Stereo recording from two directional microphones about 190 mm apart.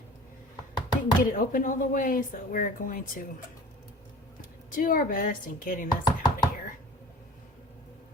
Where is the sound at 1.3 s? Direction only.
45° left (ahead or behind).